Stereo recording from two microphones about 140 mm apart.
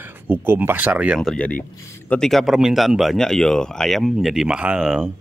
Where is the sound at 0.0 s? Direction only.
15° right (ahead or behind).